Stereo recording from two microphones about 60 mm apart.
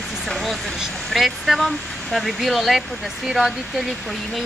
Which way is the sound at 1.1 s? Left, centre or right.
Centre.